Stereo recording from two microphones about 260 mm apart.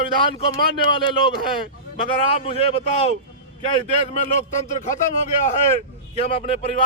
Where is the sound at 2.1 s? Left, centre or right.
Left.